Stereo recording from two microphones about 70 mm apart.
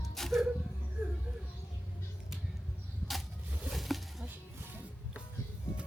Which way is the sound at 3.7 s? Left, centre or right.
Centre.